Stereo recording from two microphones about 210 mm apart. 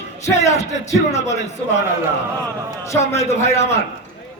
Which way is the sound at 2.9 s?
15° left (ahead or behind).